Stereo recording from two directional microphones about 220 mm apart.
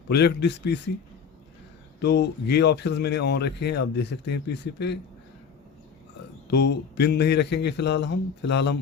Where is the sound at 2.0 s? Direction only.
50° left (ahead or behind).